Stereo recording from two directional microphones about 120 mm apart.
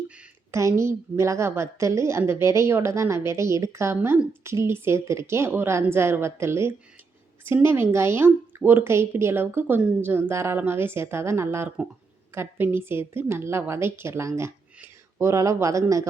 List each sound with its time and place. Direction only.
0.5 s speech: 25° right (ahead or behind)